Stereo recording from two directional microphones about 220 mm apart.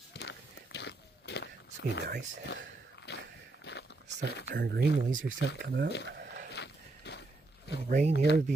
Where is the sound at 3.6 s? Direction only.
50° left (ahead or behind).